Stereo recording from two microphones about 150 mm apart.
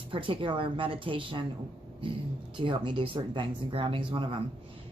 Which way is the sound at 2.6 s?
35° right (ahead or behind).